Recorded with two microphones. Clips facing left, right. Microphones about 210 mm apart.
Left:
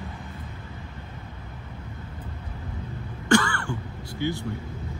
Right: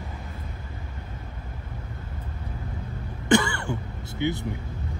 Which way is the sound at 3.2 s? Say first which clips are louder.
Even; 20° right (ahead or behind).